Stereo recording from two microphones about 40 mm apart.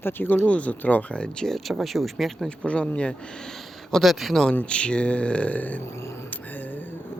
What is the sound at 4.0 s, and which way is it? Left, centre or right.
Speech, centre.